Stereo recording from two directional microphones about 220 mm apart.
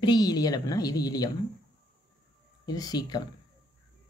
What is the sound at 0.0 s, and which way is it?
Speech, 20° left (ahead or behind).